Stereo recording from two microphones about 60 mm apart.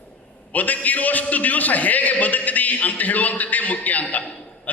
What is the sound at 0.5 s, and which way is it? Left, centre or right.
A man's voice, left.